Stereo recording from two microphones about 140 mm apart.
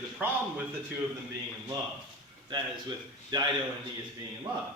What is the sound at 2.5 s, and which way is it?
Speech, 30° right (ahead or behind).